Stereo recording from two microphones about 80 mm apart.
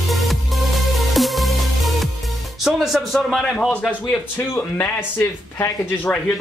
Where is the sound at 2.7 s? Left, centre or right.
Centre.